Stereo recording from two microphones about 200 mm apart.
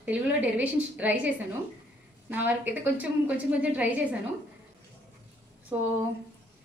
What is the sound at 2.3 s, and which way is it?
A woman's voice, 10° right (ahead or behind).